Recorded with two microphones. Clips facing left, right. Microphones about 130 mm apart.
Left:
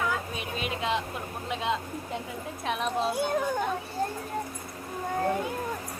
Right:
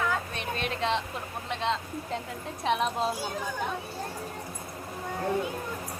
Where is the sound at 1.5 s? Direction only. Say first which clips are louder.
Even; 10° left (ahead or behind).